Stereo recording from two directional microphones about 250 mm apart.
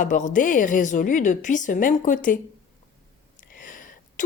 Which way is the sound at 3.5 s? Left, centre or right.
Left.